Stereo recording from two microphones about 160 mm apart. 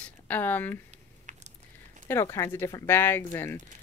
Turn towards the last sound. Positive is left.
turn(degrees=15)  # may be behind; listen again after turning